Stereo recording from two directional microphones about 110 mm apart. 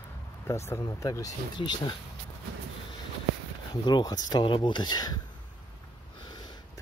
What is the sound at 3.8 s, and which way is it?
Speech, 40° left (ahead or behind).